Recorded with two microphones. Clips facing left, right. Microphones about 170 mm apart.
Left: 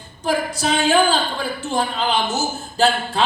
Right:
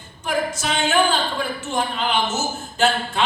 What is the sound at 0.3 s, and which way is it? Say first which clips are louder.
Speech: left 3 dB; 35° left (ahead or behind).